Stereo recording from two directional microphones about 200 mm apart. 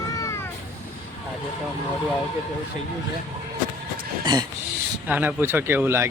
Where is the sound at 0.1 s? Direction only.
15° left (ahead or behind).